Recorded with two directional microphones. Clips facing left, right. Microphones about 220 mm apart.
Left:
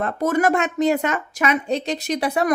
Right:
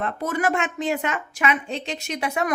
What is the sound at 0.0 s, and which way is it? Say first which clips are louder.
Speech: left 5 dB; 45° left (ahead or behind).